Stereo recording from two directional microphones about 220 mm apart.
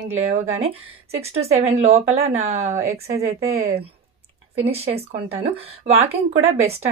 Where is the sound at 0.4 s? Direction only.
30° right (ahead or behind).